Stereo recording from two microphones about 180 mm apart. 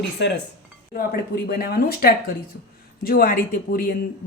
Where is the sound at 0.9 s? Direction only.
55° left (ahead or behind).